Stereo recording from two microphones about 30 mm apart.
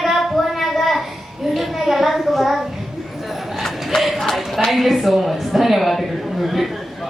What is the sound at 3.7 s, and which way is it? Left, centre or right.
Crowd, centre.